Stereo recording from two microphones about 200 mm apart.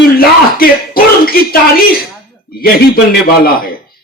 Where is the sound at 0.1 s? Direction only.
50° left (ahead or behind).